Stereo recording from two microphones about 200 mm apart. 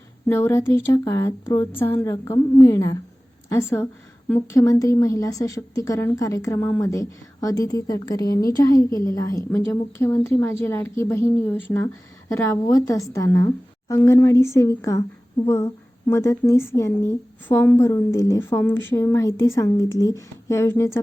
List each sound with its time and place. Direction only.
0.3 s a woman's voice: 10° left (ahead or behind)